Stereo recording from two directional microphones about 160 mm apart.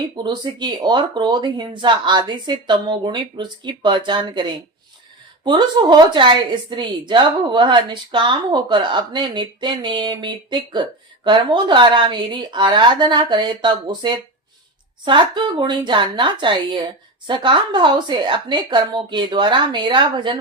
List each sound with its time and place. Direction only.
0.2 s a woman's voice: 25° right (ahead or behind)